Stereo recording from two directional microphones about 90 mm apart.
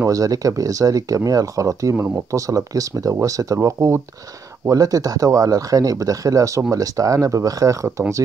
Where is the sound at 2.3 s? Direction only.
35° right (ahead or behind).